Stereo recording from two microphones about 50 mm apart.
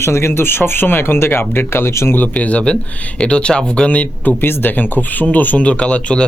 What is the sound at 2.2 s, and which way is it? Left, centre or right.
Speech, left.